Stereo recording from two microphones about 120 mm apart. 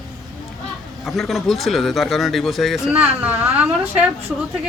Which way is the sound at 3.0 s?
15° right (ahead or behind).